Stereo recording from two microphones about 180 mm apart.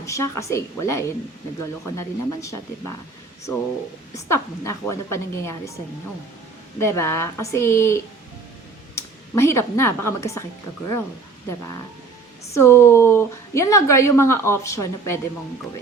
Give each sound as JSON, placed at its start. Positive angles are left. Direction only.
{"t": 0.0, "sound": "a woman's voice", "side_deg": 15}
{"t": 4.1, "sound": "a woman's voice", "side_deg": 15}
{"t": 6.7, "sound": "a woman's voice", "side_deg": 15}
{"t": 12.5, "sound": "a woman's voice", "side_deg": 15}